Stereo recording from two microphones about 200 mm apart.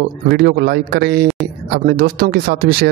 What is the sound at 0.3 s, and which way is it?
Speech, 50° right (ahead or behind).